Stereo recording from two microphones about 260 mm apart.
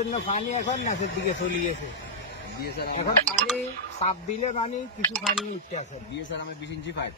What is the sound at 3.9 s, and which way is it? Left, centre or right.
Speech, left.